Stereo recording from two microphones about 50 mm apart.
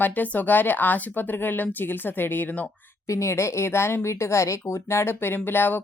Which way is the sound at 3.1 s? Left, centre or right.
Left.